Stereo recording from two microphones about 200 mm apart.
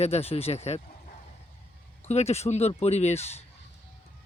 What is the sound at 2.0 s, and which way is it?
Speech, 30° left (ahead or behind).